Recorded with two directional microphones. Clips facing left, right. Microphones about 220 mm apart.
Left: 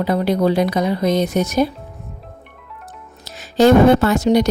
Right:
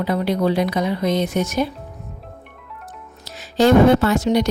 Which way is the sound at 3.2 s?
45° left (ahead or behind).